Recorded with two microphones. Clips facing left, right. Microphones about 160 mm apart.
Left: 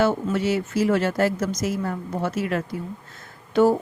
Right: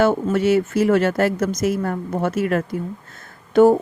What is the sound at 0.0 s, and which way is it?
A woman's voice, 50° right (ahead or behind).